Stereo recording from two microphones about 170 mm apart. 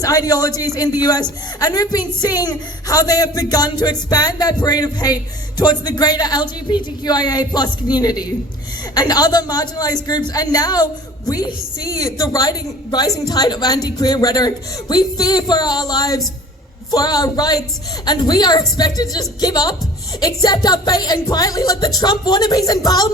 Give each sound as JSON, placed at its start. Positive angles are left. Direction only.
{"t": 0.0, "sound": "a woman's voice", "side_deg": 20}